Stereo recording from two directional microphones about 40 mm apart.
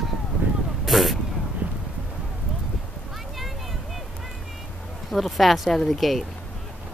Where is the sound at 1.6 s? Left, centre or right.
Right.